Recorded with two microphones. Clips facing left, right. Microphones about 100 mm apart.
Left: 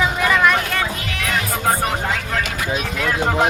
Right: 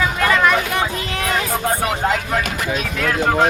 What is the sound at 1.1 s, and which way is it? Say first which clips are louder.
Music: right 3 dB; 35° right (ahead or behind).